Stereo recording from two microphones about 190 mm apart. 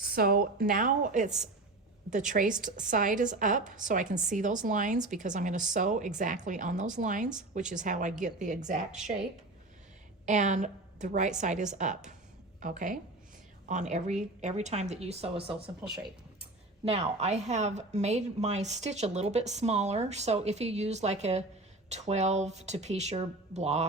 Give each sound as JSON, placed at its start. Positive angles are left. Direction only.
{"t": 0.0, "sound": "a woman's voice", "side_deg": -55}
{"t": 10.2, "sound": "a woman's voice", "side_deg": -40}
{"t": 16.8, "sound": "speech", "side_deg": -35}